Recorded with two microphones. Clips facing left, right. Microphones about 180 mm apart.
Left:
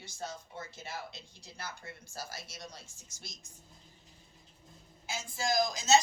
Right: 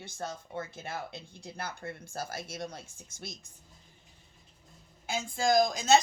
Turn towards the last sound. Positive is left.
turn(degrees=-55)  # may be behind; listen again after turning